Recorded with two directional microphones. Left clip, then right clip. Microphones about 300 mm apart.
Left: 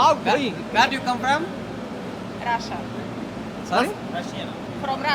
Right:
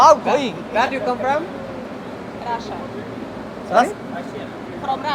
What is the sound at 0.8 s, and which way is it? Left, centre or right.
Speech, left.